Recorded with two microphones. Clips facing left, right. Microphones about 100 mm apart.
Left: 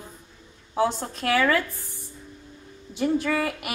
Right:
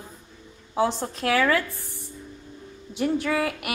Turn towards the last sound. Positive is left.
turn(degrees=0)  # may be behind; listen again after turning